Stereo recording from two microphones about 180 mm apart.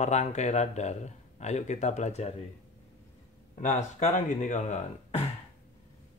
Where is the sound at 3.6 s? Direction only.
40° left (ahead or behind).